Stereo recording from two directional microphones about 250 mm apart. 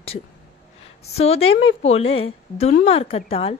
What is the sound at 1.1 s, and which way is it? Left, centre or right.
A woman's voice, left.